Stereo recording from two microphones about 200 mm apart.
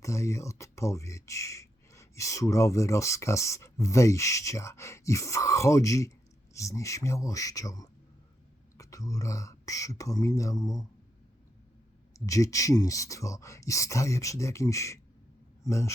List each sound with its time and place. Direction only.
0.0 s speech: 15° left (ahead or behind)
12.1 s speech: 15° left (ahead or behind)